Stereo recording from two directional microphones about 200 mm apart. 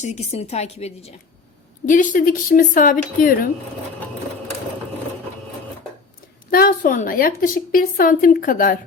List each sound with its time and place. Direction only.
0.0 s a woman's voice: 35° left (ahead or behind)
6.5 s a woman's voice: 45° left (ahead or behind)